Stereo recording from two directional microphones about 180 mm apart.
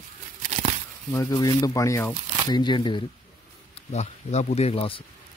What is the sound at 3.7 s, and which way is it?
Speech, 40° left (ahead or behind).